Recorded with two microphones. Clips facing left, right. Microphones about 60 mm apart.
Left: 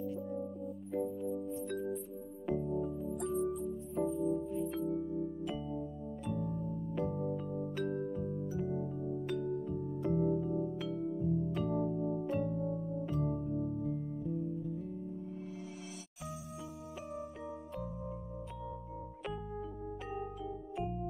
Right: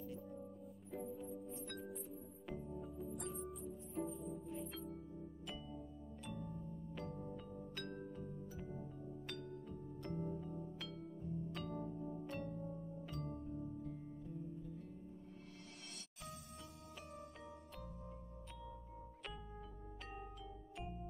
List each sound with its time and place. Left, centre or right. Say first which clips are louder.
0.0 s music: left 11 dB; centre
0.9 s organ: left 11 dB; centre
1.5 s music: left 11 dB; centre
4.9 s music: left 16 dB; left
5.4 s music: left 12 dB; centre
12.0 s electric piano: left 12 dB; left
12.3 s music: left 11 dB; centre
12.6 s music: left 12 dB; left
13.0 s music: left 11 dB; centre
20.1 s music: left 11 dB; centre